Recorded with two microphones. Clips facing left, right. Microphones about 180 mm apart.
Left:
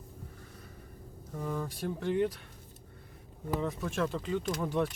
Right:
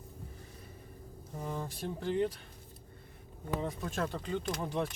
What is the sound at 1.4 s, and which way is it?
Speech, 25° right (ahead or behind).